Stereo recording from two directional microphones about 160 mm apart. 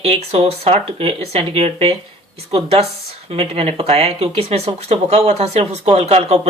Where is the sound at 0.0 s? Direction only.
40° right (ahead or behind).